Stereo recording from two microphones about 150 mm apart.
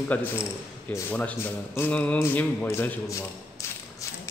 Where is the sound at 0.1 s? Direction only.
10° left (ahead or behind).